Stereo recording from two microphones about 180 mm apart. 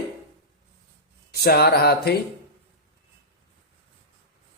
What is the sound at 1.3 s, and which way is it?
Speech, 65° left (ahead or behind).